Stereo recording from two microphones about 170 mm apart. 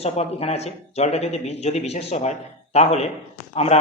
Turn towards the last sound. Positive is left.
turn(degrees=35)  # may be behind; listen again after turning